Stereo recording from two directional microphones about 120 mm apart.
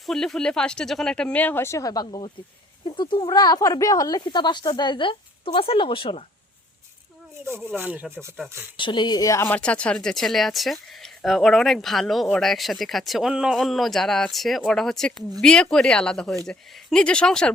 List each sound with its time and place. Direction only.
0.0 s speech: 5° left (ahead or behind); by 2.0 s 30° left (ahead or behind)
2.0 s speech: 45° left (ahead or behind)
7.4 s speech: 20° right (ahead or behind)
8.8 s speech: 40° left (ahead or behind)
9.4 s speech: 15° left (ahead or behind)